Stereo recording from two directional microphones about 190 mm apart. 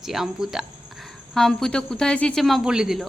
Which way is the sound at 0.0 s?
Centre (ahead or behind).